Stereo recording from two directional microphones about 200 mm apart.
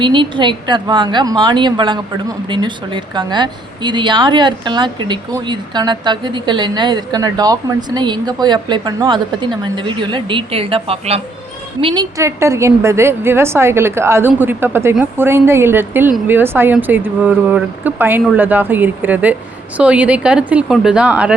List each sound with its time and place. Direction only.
0.0 s a woman's voice: 25° right (ahead or behind)
12.1 s a woman's voice: 15° right (ahead or behind)